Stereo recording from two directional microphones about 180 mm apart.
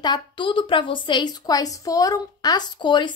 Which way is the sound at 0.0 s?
25° left (ahead or behind).